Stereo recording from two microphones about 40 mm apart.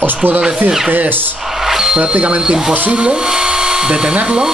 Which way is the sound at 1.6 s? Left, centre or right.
Centre.